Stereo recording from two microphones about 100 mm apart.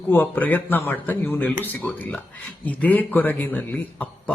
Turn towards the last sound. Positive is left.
turn(degrees=15)  # may be behind; listen again after turning